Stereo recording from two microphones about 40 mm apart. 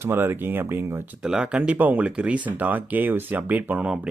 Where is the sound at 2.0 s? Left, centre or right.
Right.